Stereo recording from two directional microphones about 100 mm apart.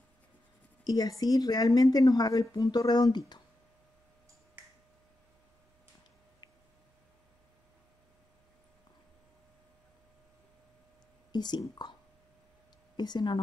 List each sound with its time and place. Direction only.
0.8 s speech: 40° left (ahead or behind)
11.3 s speech: 45° left (ahead or behind)
12.9 s a woman's voice: 45° left (ahead or behind)